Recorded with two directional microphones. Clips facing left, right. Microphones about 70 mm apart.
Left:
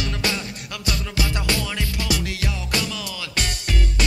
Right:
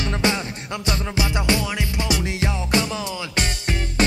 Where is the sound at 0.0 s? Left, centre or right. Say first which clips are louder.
Right 4 dB; right.